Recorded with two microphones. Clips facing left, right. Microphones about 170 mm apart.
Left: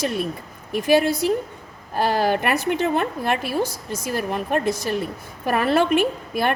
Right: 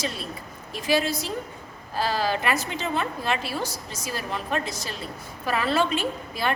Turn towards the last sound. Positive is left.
turn(degrees=55)  # may be behind; listen again after turning